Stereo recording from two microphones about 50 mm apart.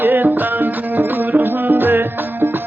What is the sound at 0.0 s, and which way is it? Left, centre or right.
Music, right.